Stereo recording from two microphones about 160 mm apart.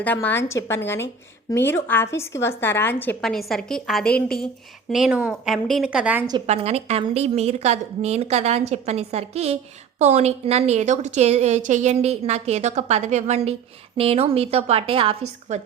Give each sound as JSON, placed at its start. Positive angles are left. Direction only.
{"t": 0.0, "sound": "speech", "side_deg": 10}
{"t": 6.5, "sound": "a woman's voice", "side_deg": -45}